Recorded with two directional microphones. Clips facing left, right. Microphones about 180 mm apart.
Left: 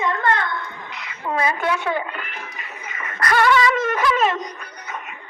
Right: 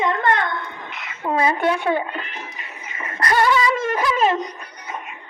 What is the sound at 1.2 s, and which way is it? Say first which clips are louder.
Speech: right 3 dB; 25° right (ahead or behind).